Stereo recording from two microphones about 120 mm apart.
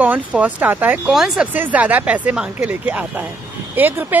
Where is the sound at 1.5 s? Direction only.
15° right (ahead or behind).